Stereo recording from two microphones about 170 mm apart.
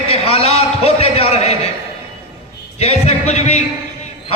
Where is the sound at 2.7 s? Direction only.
40° left (ahead or behind).